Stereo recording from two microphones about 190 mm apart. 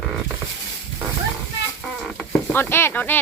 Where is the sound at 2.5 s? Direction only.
10° left (ahead or behind).